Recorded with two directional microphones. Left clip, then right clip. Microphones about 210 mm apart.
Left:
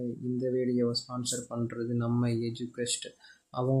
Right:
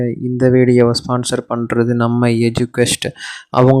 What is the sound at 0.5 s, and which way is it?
Speech, 50° right (ahead or behind).